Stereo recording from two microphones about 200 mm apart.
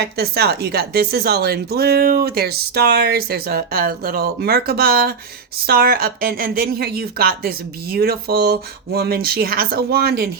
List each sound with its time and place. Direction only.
0.2 s a woman's voice: 55° right (ahead or behind)